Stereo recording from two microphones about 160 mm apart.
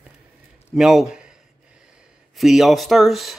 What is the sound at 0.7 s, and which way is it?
A man's voice, 5° right (ahead or behind).